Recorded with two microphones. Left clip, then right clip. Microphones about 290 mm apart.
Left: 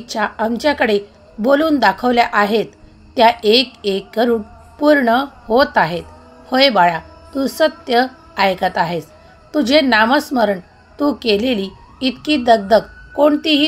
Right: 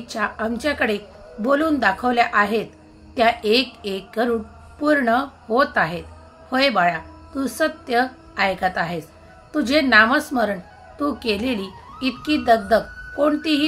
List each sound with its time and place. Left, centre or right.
0.0 s a woman's voice: centre